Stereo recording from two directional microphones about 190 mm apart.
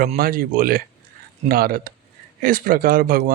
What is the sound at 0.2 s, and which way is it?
Speech, 50° right (ahead or behind).